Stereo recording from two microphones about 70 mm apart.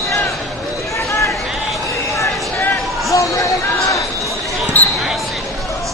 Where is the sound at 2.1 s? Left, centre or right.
Left.